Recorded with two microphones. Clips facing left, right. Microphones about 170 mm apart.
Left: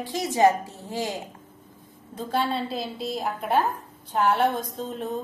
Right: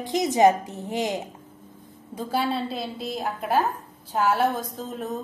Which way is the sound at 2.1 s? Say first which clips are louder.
Even; 5° right (ahead or behind).